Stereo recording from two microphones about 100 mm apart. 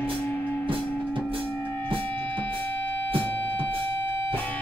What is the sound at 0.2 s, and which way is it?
Music, 20° left (ahead or behind).